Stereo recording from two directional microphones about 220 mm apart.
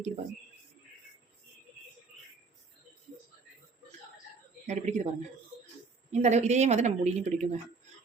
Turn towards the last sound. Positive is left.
turn(degrees=-30)  # may be behind; listen again after turning